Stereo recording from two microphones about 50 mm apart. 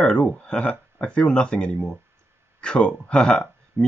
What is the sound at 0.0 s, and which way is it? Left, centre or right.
Speech, centre.